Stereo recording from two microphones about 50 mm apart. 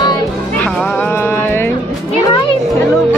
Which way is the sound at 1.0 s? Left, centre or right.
Left.